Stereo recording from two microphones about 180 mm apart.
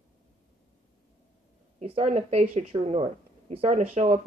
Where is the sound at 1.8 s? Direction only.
35° right (ahead or behind).